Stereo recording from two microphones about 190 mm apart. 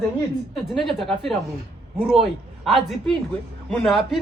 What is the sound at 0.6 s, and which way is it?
A man's voice, centre (ahead or behind).